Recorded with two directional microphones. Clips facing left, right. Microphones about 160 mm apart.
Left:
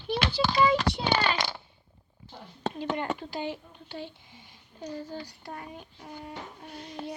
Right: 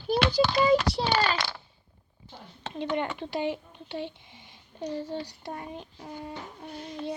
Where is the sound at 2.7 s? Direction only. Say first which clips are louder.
Right 4 dB; 25° right (ahead or behind).